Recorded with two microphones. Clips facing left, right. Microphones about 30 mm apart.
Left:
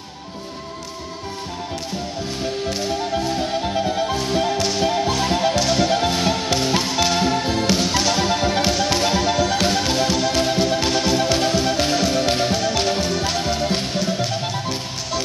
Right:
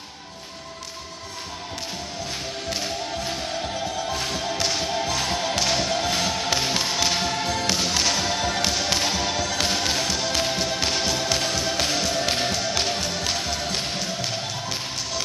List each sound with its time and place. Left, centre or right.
4.6 s whip: centre
5.2 s music: centre
5.6 s whip: centre
5.9 s whip: centre
6.7 s music: centre
8.7 s music: centre
9.2 s whip: centre
9.6 s music: centre
11.1 s music: centre
13.4 s music: centre
13.7 s music: centre